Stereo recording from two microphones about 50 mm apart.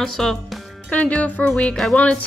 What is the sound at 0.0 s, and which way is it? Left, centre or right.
Speech, centre.